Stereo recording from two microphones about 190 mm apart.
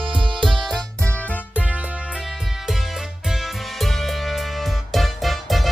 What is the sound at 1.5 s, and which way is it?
Music, 5° right (ahead or behind).